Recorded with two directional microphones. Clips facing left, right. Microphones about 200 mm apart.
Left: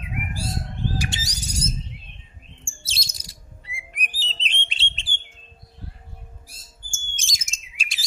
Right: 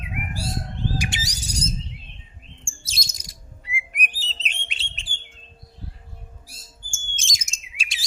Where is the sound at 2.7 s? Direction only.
30° left (ahead or behind).